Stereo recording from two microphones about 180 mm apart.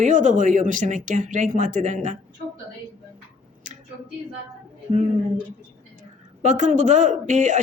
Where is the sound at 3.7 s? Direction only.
45° right (ahead or behind).